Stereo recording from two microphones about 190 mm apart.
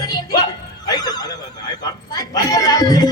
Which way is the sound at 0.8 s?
20° left (ahead or behind).